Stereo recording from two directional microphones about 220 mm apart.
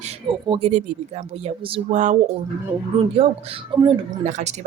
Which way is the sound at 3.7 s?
20° right (ahead or behind).